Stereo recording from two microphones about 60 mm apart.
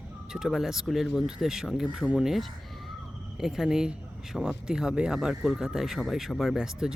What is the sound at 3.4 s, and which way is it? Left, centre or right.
Speech, centre.